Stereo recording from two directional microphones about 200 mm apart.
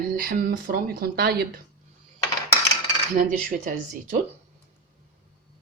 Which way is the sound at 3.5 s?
45° right (ahead or behind).